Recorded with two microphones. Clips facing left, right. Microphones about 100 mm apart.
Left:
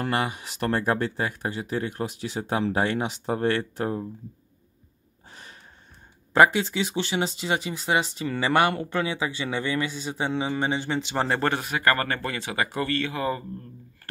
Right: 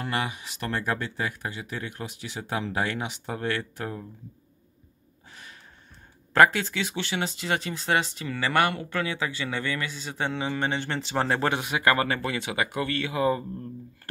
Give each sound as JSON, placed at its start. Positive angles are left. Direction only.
{"t": 0.0, "sound": "speech", "side_deg": 35}
{"t": 5.3, "sound": "gasp", "side_deg": 35}
{"t": 6.3, "sound": "a man's voice", "side_deg": 15}
{"t": 11.1, "sound": "speech", "side_deg": 0}
{"t": 11.5, "sound": "speech", "side_deg": -10}